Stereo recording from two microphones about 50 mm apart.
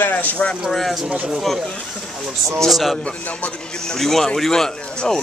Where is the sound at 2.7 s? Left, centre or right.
Centre.